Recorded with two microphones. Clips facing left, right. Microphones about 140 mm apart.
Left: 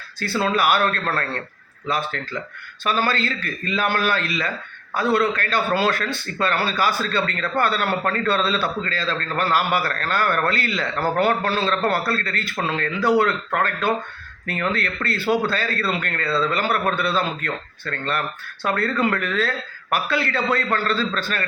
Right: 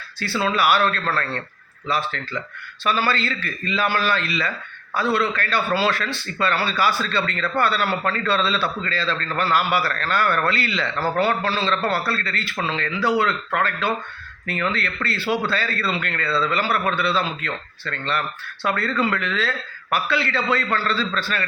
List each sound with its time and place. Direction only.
0.2 s a man's voice: 45° left (ahead or behind)